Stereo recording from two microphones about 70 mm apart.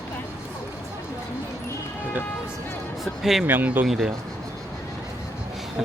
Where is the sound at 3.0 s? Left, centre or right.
Centre.